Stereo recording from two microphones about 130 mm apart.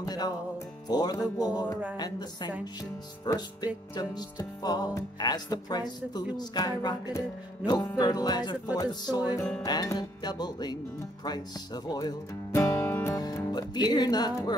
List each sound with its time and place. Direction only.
0.0 s music: 30° left (ahead or behind)
0.8 s speech: 30° left (ahead or behind)
12.5 s music: 20° left (ahead or behind)
13.2 s music: 30° left (ahead or behind)